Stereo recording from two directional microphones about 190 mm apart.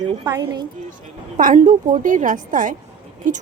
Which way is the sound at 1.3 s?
40° right (ahead or behind).